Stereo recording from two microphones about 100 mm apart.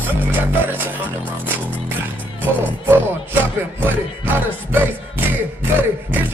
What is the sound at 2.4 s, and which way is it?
Speech, 20° right (ahead or behind).